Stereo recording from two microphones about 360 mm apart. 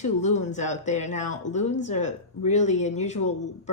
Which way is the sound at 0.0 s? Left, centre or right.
Centre.